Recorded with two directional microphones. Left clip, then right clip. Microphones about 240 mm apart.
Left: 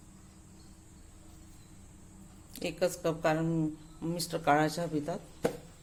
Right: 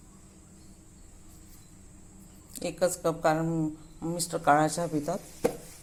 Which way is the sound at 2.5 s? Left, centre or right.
Centre.